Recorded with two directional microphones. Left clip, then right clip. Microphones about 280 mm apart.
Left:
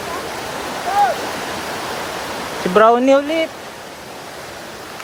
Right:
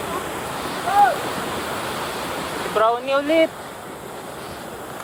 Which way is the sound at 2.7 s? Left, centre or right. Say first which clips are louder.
Left 8 dB; left.